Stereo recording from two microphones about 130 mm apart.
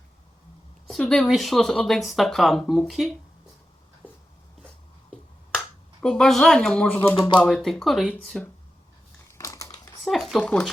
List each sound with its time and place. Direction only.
0.9 s speech: 5° left (ahead or behind)
5.1 s a sound: 5° left (ahead or behind)
7.3 s speech: 5° left (ahead or behind)
9.1 s typing: 25° left (ahead or behind)
10.0 s a sound: centre (ahead or behind)
10.4 s speech: 10° left (ahead or behind)